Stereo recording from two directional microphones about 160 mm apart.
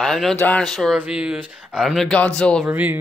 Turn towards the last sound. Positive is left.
turn(degrees=-10)  # may be behind; listen again after turning